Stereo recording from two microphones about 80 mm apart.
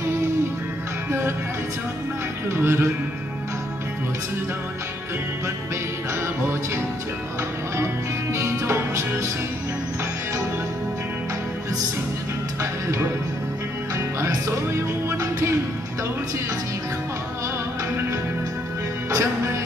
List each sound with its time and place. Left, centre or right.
2.5 s speech: right
7.7 s music: right
19.0 s music: right